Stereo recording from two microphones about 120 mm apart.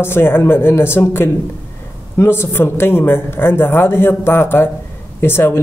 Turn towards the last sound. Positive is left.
turn(degrees=20)  # may be behind; listen again after turning